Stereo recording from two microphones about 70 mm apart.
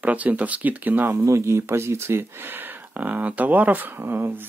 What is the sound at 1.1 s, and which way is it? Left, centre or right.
Speech, right.